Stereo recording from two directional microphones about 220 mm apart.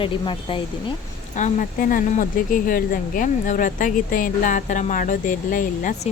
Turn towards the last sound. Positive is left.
turn(degrees=35)  # may be behind; listen again after turning